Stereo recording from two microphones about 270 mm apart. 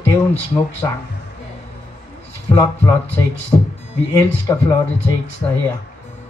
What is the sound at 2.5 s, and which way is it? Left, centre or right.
Speech, centre.